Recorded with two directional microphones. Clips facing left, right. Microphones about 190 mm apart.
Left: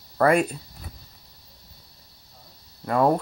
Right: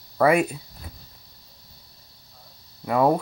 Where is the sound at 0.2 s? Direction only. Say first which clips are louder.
Right 1 dB; 5° right (ahead or behind).